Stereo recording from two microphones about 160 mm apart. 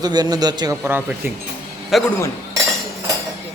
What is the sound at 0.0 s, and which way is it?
Speech, 25° right (ahead or behind).